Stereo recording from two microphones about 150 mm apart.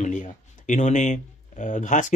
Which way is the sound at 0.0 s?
55° left (ahead or behind).